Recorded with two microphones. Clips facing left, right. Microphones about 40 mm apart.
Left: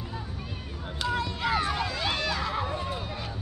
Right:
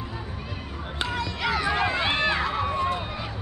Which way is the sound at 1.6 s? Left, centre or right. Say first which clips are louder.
Right 5 dB; right.